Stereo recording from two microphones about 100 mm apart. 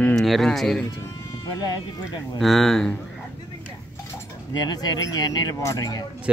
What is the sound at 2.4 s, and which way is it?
Speech, centre (ahead or behind).